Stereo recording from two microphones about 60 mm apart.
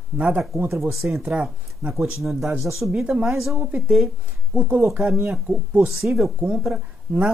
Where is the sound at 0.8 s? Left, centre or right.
Centre.